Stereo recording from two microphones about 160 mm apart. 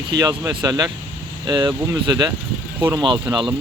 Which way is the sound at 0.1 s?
25° right (ahead or behind).